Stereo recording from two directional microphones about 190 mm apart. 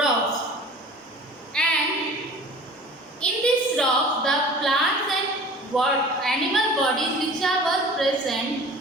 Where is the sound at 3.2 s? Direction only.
5° left (ahead or behind).